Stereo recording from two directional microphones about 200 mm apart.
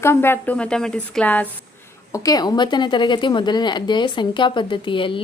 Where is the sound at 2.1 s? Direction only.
20° left (ahead or behind).